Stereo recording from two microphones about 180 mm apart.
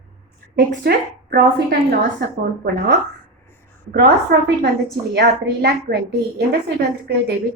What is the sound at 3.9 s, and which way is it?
A woman's voice, 65° right (ahead or behind).